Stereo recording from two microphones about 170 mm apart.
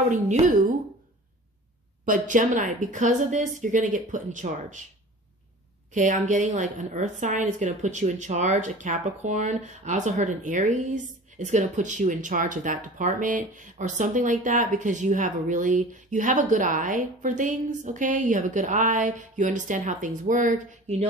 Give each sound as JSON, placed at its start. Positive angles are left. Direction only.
{"t": 0.1, "sound": "a woman's voice", "side_deg": -45}
{"t": 2.0, "sound": "a woman's voice", "side_deg": -50}
{"t": 5.9, "sound": "a woman's voice", "side_deg": -45}